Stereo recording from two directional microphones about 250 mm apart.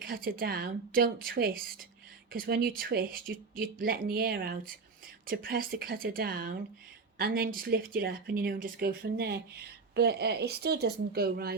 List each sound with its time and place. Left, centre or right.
0.0 s speech: right